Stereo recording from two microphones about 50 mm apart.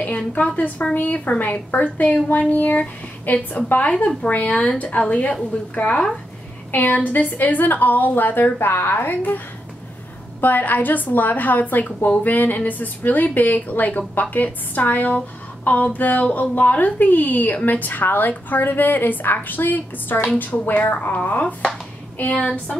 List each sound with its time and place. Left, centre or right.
0.9 s a woman's voice: left
10.4 s a woman's voice: left
22.2 s speech: left